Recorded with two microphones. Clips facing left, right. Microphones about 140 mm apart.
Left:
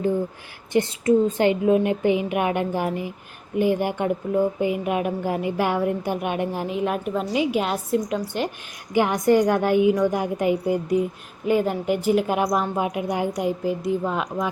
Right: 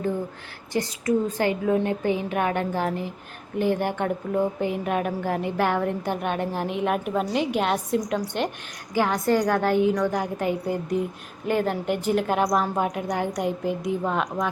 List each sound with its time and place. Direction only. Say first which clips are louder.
0.7 s a woman's voice: left 5 dB; 25° left (ahead or behind); by 8.2 s centre (ahead or behind)
8.9 s a woman's voice: left 3 dB; 15° left (ahead or behind)